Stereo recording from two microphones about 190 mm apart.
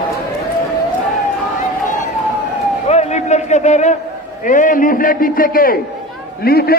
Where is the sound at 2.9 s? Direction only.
35° left (ahead or behind).